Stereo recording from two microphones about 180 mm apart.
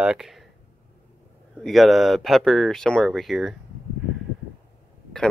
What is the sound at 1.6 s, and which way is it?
Speech, centre (ahead or behind).